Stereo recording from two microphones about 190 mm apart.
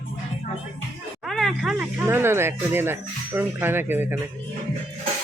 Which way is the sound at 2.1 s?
10° right (ahead or behind).